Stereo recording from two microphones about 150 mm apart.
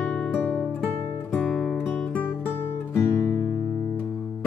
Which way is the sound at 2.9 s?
20° left (ahead or behind).